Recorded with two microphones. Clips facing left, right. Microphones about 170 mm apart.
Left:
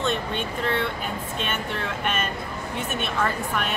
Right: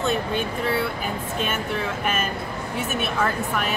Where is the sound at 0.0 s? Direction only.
5° right (ahead or behind).